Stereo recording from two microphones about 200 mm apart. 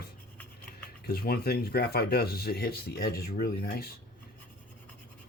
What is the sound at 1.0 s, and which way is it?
Speech, 50° left (ahead or behind).